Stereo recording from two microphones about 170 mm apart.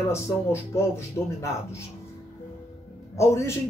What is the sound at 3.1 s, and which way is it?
Speech, 15° left (ahead or behind).